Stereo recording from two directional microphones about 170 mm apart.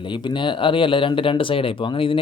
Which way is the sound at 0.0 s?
25° left (ahead or behind).